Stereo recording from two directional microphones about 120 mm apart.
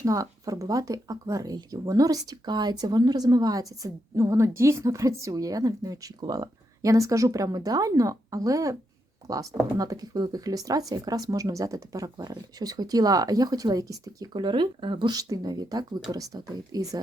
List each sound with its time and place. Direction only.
0.0 s speech: 30° right (ahead or behind)
14.4 s speech: 40° right (ahead or behind)